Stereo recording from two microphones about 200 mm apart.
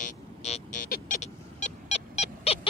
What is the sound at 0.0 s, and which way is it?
Vehicle, 35° left (ahead or behind).